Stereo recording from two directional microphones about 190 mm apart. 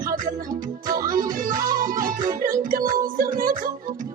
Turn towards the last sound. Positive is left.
turn(degrees=-45)  # may be behind; listen again after turning